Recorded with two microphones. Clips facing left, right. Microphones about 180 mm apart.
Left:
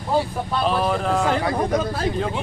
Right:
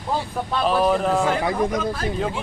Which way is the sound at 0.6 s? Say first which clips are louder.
Right 3 dB; 5° right (ahead or behind).